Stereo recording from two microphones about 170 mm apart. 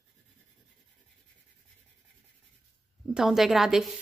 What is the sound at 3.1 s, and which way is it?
Speech, centre (ahead or behind).